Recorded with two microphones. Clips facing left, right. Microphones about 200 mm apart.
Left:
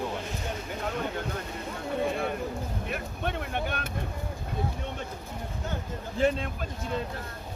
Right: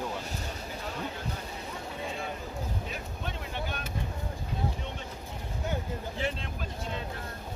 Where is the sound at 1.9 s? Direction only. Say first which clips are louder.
Left 10 dB; 55° left (ahead or behind).